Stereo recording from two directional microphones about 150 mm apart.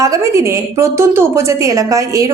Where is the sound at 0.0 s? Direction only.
20° right (ahead or behind).